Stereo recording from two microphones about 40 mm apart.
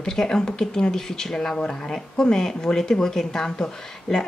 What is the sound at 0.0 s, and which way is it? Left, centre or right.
Speech, centre.